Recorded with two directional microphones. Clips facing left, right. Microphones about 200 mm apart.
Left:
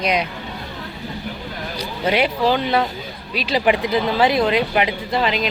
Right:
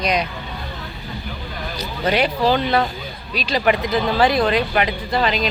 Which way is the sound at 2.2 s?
15° left (ahead or behind).